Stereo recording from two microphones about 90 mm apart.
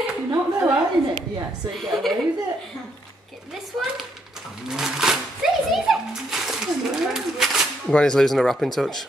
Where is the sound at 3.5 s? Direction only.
5° right (ahead or behind).